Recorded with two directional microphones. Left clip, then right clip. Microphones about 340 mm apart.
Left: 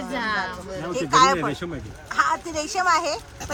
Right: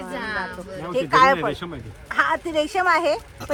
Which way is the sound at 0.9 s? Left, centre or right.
Right.